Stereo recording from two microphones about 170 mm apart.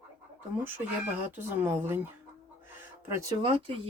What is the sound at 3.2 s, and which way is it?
Speech, 30° right (ahead or behind).